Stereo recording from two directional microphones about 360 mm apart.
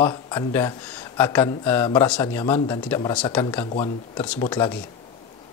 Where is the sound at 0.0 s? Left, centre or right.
Centre.